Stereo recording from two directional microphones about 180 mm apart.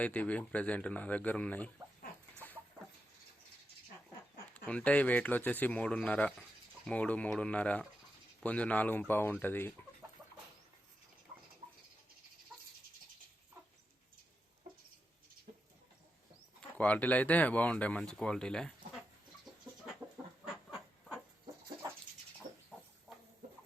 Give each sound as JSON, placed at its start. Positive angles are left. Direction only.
{"t": 0.0, "sound": "speech", "side_deg": 10}
{"t": 4.5, "sound": "speech", "side_deg": 10}
{"t": 16.6, "sound": "speech", "side_deg": 5}
{"t": 22.5, "sound": "chicken", "side_deg": -45}